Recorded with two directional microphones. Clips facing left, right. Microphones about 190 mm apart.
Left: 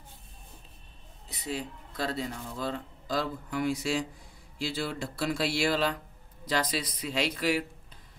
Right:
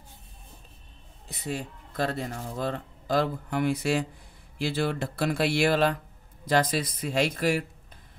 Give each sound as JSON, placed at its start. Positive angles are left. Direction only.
{"t": 1.3, "sound": "speech", "side_deg": -50}